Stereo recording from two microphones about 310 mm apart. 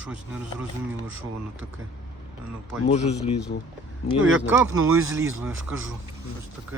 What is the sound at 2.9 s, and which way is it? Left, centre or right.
Speech, centre.